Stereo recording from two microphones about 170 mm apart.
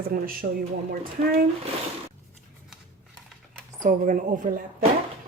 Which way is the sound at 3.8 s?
45° right (ahead or behind).